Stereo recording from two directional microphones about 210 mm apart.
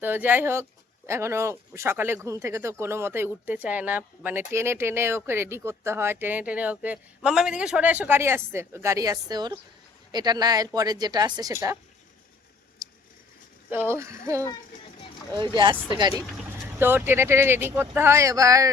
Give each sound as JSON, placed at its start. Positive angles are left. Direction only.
{"t": 0.0, "sound": "speech", "side_deg": -10}
{"t": 13.7, "sound": "speech", "side_deg": -10}
{"t": 16.2, "sound": "vehicle", "side_deg": 0}
{"t": 16.8, "sound": "speech", "side_deg": -10}